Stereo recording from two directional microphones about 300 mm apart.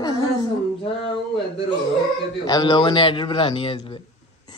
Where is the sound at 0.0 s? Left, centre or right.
Centre.